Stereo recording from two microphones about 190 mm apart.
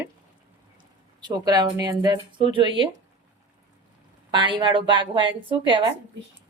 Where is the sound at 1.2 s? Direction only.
20° right (ahead or behind).